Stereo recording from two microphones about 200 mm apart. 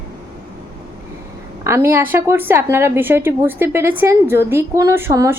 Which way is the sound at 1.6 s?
15° right (ahead or behind).